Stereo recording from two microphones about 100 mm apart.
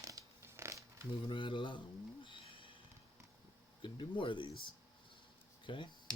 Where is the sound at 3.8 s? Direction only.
60° left (ahead or behind).